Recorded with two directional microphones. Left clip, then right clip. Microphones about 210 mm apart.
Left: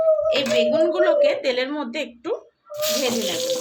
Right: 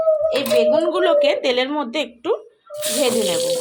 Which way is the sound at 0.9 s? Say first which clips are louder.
Right 2 dB; 30° right (ahead or behind).